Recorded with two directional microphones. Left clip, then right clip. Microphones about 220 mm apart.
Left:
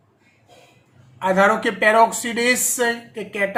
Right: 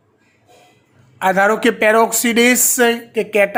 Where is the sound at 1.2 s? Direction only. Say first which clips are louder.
Right 3 dB; 50° right (ahead or behind).